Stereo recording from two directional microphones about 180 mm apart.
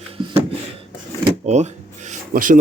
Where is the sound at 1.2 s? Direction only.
40° right (ahead or behind).